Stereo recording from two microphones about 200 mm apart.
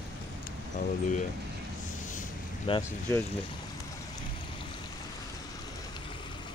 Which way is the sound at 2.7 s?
25° left (ahead or behind).